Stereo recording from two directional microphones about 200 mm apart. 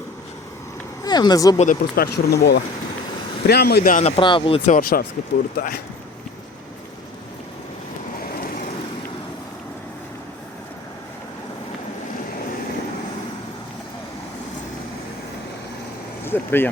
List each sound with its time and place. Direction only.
1.0 s speech: 20° left (ahead or behind)
1.5 s speech: 40° left (ahead or behind)
2.1 s speech: 55° left (ahead or behind)
3.9 s speech: 30° left (ahead or behind)
4.8 s speech: 45° left (ahead or behind)
8.2 s vehicle: 45° left (ahead or behind)
16.2 s vehicle: 10° left (ahead or behind)